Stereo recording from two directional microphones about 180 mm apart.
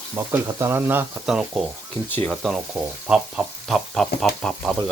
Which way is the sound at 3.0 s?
5° right (ahead or behind).